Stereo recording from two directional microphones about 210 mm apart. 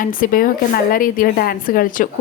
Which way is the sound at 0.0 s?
40° left (ahead or behind).